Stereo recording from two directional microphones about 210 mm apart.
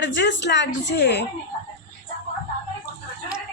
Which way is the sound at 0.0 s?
60° left (ahead or behind).